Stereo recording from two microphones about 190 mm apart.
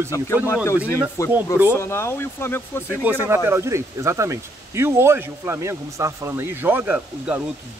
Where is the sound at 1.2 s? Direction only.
15° left (ahead or behind).